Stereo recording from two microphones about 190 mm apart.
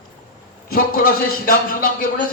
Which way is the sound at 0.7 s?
50° left (ahead or behind).